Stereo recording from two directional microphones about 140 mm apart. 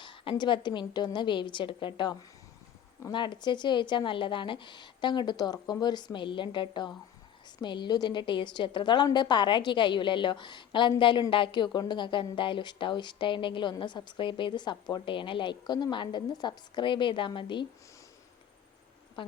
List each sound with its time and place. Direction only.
0.0 s a woman's voice: 35° left (ahead or behind)